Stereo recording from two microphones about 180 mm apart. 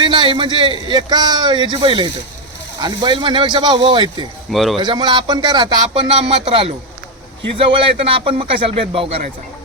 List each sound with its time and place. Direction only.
0.0 s a man's voice: 25° right (ahead or behind)
4.5 s a man's voice: centre (ahead or behind)
4.8 s a man's voice: 25° right (ahead or behind)